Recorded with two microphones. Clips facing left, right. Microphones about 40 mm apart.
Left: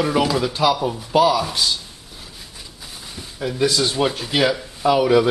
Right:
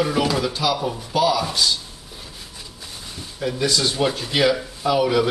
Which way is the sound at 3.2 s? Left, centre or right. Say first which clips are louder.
Even; centre.